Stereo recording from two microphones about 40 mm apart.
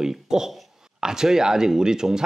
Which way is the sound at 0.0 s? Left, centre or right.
Centre.